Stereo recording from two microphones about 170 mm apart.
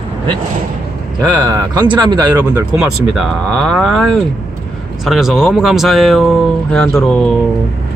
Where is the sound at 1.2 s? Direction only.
20° right (ahead or behind).